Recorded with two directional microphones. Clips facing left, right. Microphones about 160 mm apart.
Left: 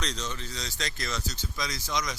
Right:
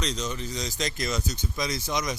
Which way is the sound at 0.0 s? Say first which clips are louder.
Right 4 dB; 5° right (ahead or behind).